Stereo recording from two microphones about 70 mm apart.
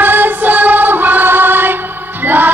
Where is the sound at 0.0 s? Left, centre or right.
Right.